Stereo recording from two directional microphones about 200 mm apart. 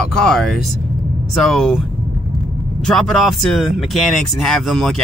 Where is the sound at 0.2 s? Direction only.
Centre (ahead or behind).